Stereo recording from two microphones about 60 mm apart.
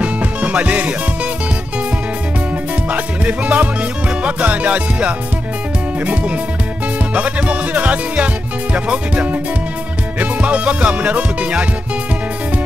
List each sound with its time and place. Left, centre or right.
0.0 s music: right
2.9 s music: right
7.2 s music: right
10.4 s music: right